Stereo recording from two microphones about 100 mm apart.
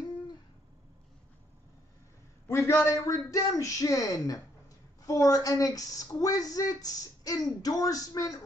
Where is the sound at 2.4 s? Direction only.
30° left (ahead or behind).